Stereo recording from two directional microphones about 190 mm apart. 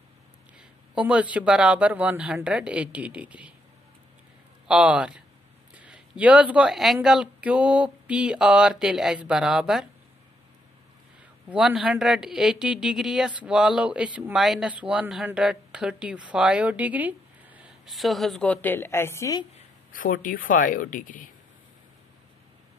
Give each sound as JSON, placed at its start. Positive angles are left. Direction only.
{"t": 0.6, "sound": "speech", "side_deg": -5}
{"t": 4.6, "sound": "speech", "side_deg": -5}
{"t": 11.5, "sound": "speech", "side_deg": 0}
{"t": 19.9, "sound": "a woman's voice", "side_deg": 45}